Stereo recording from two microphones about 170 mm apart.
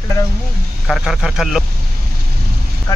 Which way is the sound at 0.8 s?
Centre (ahead or behind).